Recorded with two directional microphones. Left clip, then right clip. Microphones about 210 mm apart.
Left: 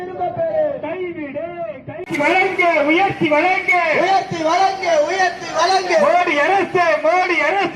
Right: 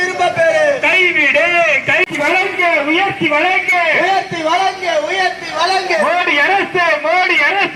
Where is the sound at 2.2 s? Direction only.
45° left (ahead or behind).